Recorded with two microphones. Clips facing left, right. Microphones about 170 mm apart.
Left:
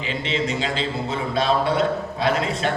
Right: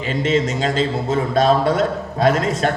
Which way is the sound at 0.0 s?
45° right (ahead or behind).